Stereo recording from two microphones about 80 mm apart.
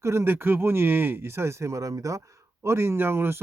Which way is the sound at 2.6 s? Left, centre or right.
Right.